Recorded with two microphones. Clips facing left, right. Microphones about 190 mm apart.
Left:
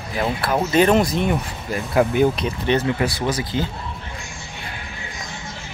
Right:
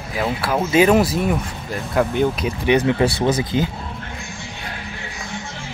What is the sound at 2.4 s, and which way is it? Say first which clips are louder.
Speech: right 3 dB; 15° right (ahead or behind).